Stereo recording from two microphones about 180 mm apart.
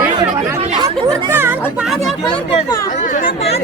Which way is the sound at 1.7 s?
5° right (ahead or behind).